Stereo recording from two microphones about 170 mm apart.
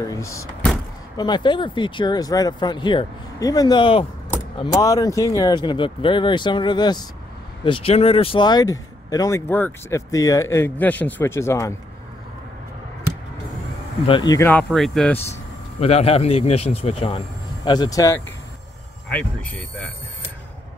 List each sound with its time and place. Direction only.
0.0 s speech: 20° left (ahead or behind)
14.0 s speech: 25° left (ahead or behind)
14.5 s speech: 5° left (ahead or behind)
15.8 s a man's voice: 35° left (ahead or behind)
17.6 s speech: 20° left (ahead or behind)
19.0 s speech: 10° left (ahead or behind)